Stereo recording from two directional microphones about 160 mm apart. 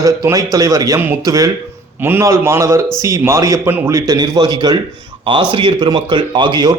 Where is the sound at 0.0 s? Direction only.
20° right (ahead or behind).